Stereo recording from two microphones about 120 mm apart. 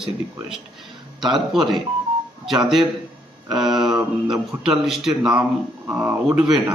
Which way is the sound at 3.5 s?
5° right (ahead or behind).